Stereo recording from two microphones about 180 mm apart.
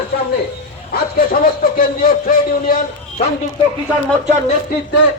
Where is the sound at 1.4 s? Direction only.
50° left (ahead or behind).